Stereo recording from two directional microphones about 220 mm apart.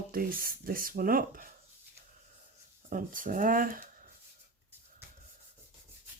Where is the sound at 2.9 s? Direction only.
40° right (ahead or behind).